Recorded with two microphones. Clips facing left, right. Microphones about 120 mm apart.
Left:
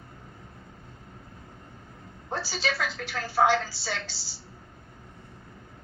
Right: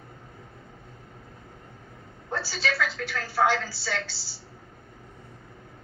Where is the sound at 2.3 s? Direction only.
15° left (ahead or behind).